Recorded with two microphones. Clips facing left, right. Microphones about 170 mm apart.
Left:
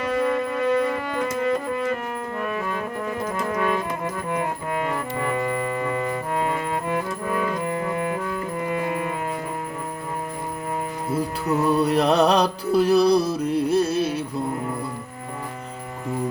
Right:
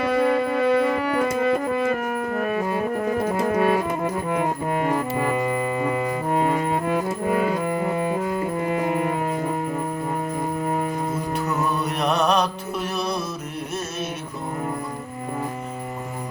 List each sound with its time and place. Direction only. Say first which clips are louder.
0.2 s music: right 2 dB; 40° right (ahead or behind)
2.5 s music: right 4 dB; 40° right (ahead or behind)
4.9 s brass instrument: right 3 dB; 35° right (ahead or behind)
5.4 s music: right 2 dB; 20° right (ahead or behind)
6.3 s music: right 5 dB; 40° right (ahead or behind)
8.6 s brass instrument: right 2 dB; 25° right (ahead or behind)
11.2 s music: left 2 dB; 30° left (ahead or behind)